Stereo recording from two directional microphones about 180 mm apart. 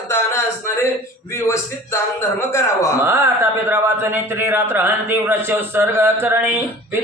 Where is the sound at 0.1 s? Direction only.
15° left (ahead or behind).